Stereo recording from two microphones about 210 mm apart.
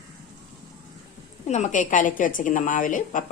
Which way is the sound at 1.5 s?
35° left (ahead or behind).